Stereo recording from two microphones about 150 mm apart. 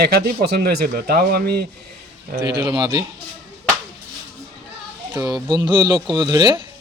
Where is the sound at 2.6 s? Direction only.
30° right (ahead or behind).